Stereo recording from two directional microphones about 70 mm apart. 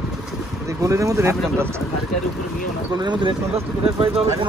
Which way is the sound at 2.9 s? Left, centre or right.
Right.